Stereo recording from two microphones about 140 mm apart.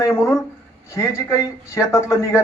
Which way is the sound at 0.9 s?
20° left (ahead or behind).